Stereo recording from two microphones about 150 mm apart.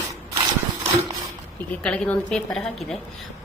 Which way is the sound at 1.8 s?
5° left (ahead or behind).